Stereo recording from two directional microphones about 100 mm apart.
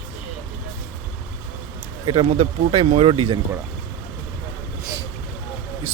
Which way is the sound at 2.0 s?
80° right.